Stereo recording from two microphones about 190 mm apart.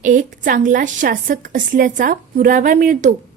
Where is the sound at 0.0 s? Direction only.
40° right (ahead or behind).